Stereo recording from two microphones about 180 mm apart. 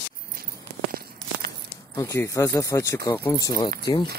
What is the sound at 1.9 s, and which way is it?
Speech, 15° left (ahead or behind).